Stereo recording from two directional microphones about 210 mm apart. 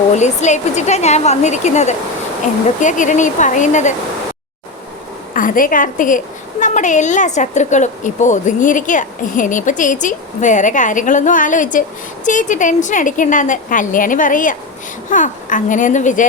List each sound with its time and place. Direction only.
0.1 s a woman's voice: 35° left (ahead or behind)
5.3 s a woman's voice: 40° left (ahead or behind)